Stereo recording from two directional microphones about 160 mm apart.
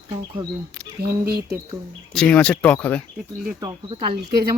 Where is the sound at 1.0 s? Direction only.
75° right (ahead or behind).